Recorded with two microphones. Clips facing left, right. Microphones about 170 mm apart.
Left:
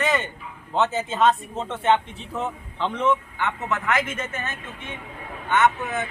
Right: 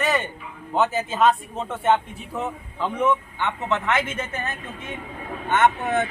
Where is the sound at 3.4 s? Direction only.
25° right (ahead or behind).